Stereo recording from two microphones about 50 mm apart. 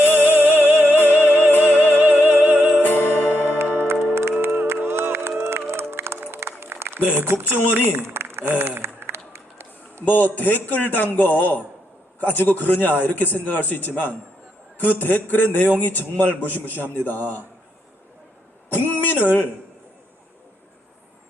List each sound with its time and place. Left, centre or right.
0.0 s music: left
4.1 s music: right
7.0 s speech: right
7.9 s a sound: right
10.1 s a man's voice: left
18.7 s a man's voice: left